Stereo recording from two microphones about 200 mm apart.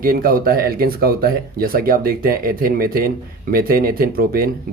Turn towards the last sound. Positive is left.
turn(degrees=-45)  # may be behind; listen again after turning